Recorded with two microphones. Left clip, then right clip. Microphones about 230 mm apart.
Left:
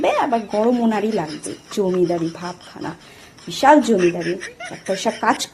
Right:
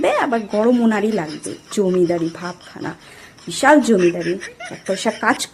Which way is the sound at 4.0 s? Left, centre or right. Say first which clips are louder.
Right 1 dB; centre.